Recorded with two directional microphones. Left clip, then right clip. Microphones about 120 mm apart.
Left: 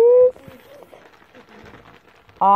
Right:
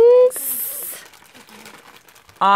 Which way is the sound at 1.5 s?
20° right (ahead or behind).